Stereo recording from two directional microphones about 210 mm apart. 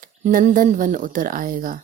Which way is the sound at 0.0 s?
40° right (ahead or behind).